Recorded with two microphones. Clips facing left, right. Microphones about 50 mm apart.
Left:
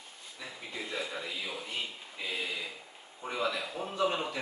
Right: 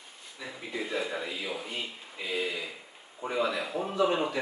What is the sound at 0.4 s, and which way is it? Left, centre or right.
A man's voice, centre.